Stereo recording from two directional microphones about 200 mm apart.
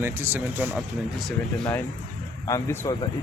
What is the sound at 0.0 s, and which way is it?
Speech, 10° right (ahead or behind).